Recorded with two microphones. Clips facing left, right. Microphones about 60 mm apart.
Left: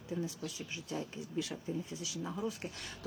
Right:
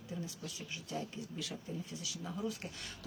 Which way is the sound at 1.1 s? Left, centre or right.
Left.